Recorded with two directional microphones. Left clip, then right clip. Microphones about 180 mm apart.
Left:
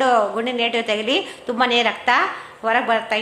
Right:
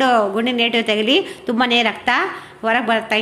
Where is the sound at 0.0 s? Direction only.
35° right (ahead or behind).